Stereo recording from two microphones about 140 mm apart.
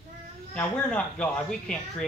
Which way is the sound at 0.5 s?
10° left (ahead or behind).